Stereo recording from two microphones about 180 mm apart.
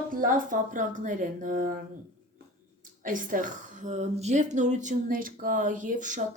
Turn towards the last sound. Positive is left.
turn(degrees=-45)  # may be behind; listen again after turning